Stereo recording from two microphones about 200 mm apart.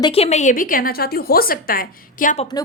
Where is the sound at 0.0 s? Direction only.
30° left (ahead or behind).